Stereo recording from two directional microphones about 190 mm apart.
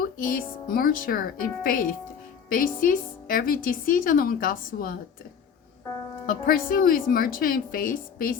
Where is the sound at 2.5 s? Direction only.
45° left (ahead or behind).